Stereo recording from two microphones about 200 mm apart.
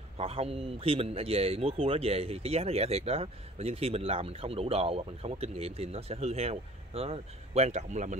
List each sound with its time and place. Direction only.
0.2 s a man's voice: 30° right (ahead or behind)